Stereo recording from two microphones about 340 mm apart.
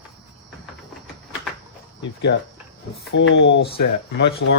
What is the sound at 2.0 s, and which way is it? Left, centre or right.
Speech, left.